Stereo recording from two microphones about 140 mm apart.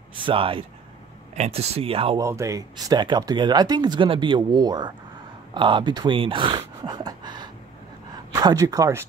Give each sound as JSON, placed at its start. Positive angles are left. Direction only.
{"t": 0.2, "sound": "speech", "side_deg": -40}
{"t": 1.3, "sound": "speech", "side_deg": -50}
{"t": 2.1, "sound": "speech", "side_deg": -20}